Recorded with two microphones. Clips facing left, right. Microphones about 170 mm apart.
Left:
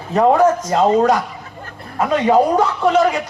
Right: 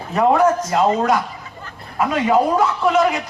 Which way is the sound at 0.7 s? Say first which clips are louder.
Left 2 dB; 35° left (ahead or behind).